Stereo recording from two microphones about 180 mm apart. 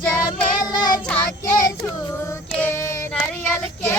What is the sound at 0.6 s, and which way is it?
Child singing, 20° left (ahead or behind).